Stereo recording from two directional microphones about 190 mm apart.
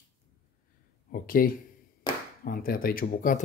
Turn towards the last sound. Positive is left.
turn(degrees=45)  # may be behind; listen again after turning